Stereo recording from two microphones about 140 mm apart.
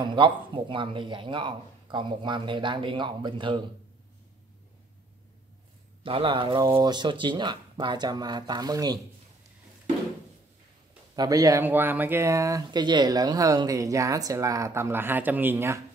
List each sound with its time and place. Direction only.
0.0 s speech: 35° right (ahead or behind)
6.0 s speech: 40° right (ahead or behind)
11.1 s speech: 25° right (ahead or behind)
11.6 s speech: 15° right (ahead or behind)